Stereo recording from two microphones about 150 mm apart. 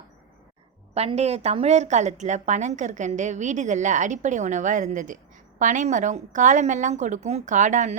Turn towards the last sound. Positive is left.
turn(degrees=-55)  # may be behind; listen again after turning